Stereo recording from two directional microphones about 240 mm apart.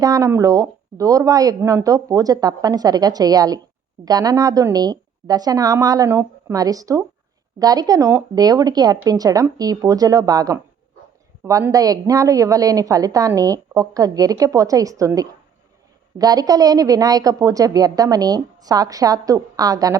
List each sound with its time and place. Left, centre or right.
0.0 s speech: centre